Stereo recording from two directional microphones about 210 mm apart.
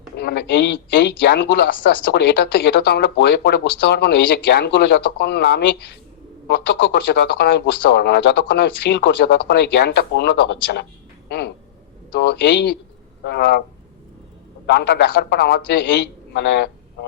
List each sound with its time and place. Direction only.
0.2 s speech: 50° left (ahead or behind)
14.7 s speech: 50° left (ahead or behind)